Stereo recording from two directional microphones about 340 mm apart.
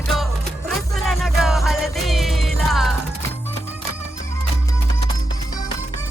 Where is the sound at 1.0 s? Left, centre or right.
Centre.